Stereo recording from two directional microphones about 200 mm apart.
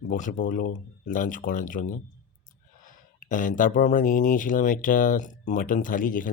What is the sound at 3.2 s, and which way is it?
Speech, 40° left (ahead or behind).